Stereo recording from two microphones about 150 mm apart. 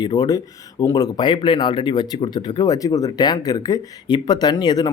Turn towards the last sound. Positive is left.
turn(degrees=25)  # may be behind; listen again after turning